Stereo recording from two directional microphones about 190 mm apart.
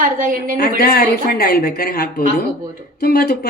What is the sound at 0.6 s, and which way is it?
Speech, 50° left (ahead or behind).